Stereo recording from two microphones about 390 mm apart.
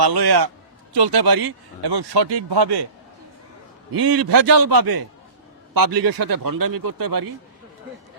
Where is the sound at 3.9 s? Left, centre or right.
Right.